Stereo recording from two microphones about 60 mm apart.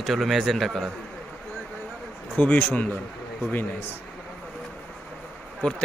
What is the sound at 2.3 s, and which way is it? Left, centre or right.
Speech, left.